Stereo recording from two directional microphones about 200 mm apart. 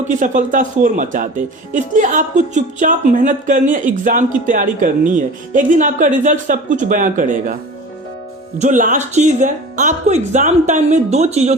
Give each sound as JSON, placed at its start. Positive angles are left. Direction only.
{"t": 0.1, "sound": "speech", "side_deg": -40}
{"t": 8.5, "sound": "speech", "side_deg": -35}